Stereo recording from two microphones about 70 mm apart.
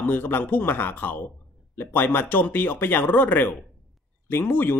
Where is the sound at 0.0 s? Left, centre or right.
Left.